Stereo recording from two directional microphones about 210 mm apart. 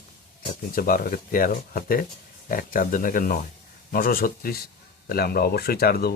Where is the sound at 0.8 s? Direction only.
45° left (ahead or behind).